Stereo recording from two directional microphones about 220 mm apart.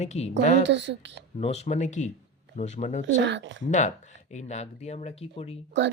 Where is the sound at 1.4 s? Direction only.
30° left (ahead or behind).